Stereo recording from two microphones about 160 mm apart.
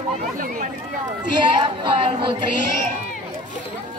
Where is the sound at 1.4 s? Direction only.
30° right (ahead or behind).